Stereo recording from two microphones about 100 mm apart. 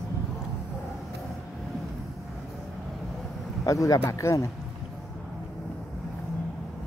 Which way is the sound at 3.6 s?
35° left (ahead or behind).